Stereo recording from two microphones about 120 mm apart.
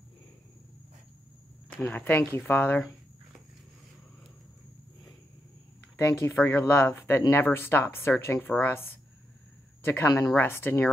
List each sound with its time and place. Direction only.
1.7 s speech: 15° left (ahead or behind)
5.9 s speech: 20° left (ahead or behind)
10.0 s speech: 30° left (ahead or behind)
10.3 s speech: 20° left (ahead or behind)